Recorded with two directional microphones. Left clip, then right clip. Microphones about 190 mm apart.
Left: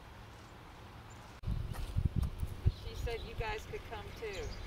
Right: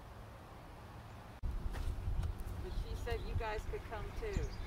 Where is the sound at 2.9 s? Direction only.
55° right (ahead or behind).